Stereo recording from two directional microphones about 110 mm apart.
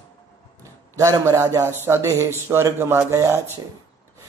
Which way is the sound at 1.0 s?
30° right (ahead or behind).